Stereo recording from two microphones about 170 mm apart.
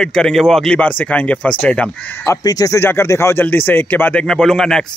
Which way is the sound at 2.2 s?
20° left (ahead or behind).